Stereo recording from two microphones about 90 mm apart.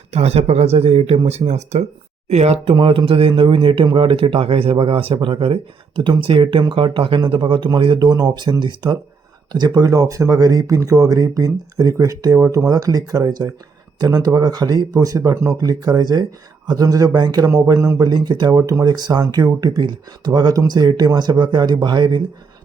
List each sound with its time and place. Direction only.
0.9 s speech: 90° right
2.6 s speech: 80° right; by 7.9 s 65° right (ahead or behind)
7.9 s speech: 50° right (ahead or behind)